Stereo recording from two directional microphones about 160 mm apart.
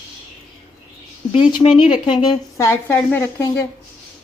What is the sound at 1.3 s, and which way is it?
A woman's voice, 30° left (ahead or behind).